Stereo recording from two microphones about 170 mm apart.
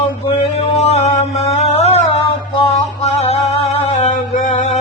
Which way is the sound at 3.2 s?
35° left (ahead or behind).